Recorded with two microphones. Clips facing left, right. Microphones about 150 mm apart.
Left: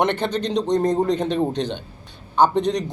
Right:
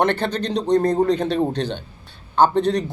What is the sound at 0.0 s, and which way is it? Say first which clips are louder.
Speech: right 1 dB; 15° left (ahead or behind).